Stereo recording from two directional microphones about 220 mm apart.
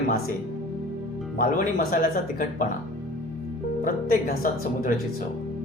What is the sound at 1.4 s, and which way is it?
Speech, 40° left (ahead or behind).